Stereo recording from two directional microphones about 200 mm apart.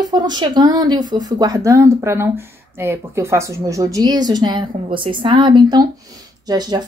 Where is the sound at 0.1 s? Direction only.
20° right (ahead or behind).